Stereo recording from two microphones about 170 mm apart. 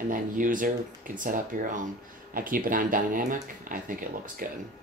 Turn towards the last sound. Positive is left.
turn(degrees=-55)  # may be behind; listen again after turning